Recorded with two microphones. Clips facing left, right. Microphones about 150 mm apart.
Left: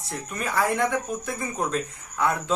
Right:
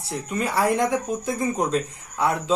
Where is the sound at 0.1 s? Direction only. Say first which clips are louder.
Right 4 dB; 30° right (ahead or behind).